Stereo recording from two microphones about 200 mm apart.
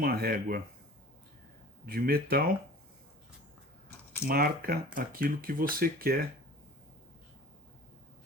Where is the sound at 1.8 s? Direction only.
50° right (ahead or behind).